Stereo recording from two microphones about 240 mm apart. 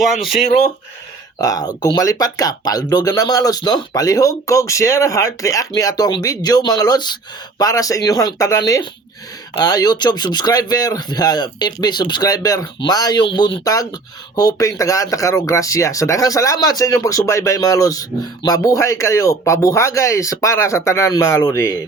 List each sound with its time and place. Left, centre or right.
0.0 s speech: centre
1.4 s speech: centre